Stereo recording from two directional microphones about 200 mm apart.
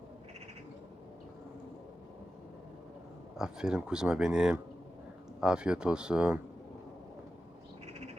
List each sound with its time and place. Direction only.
3.3 s speech: 5° right (ahead or behind)